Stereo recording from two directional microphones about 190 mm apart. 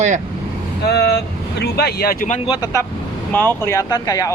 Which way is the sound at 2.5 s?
20° left (ahead or behind).